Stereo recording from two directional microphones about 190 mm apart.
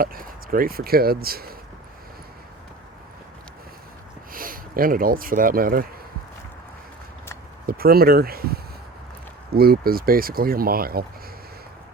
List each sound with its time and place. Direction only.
0.0 s speech: 50° right (ahead or behind)
4.3 s speech: 50° right (ahead or behind)
7.7 s speech: 50° right (ahead or behind)